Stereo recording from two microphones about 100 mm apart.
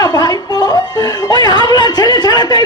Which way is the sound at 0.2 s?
50° left (ahead or behind).